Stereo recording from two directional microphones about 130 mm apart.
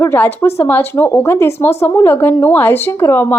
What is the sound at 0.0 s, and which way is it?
A woman's voice, 20° left (ahead or behind).